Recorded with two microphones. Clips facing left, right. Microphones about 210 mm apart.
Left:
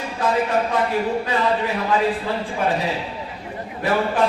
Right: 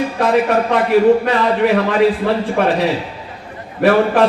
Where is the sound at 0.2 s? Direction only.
75° right (ahead or behind).